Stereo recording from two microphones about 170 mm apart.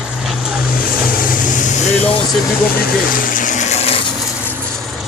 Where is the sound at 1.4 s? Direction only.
50° left (ahead or behind).